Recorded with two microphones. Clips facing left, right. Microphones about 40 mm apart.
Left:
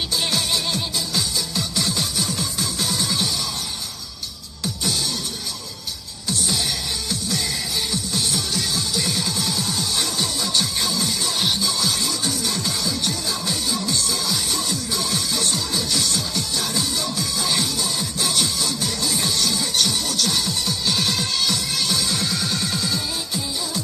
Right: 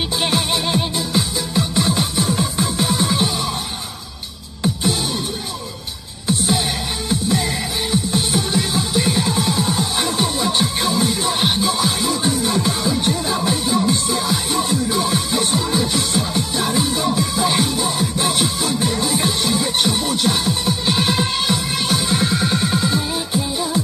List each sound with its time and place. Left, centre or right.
0.2 s music: right
6.2 s music: right